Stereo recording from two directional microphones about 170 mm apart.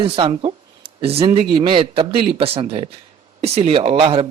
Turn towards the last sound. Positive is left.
turn(degrees=-35)  # may be behind; listen again after turning